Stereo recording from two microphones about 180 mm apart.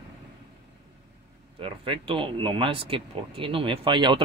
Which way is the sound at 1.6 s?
30° right (ahead or behind).